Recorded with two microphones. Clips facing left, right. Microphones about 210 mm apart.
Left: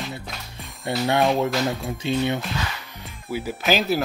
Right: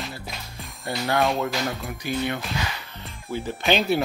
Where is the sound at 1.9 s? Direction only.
25° left (ahead or behind).